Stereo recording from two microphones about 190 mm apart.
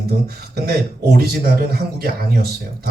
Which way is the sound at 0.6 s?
55° right (ahead or behind).